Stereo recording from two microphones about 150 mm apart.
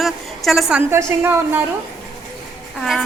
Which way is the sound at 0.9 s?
15° right (ahead or behind).